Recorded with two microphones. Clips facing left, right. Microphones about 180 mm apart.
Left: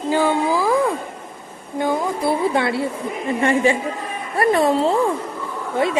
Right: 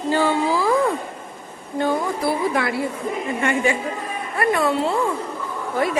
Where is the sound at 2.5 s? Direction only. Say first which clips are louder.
Left 2 dB; 25° left (ahead or behind).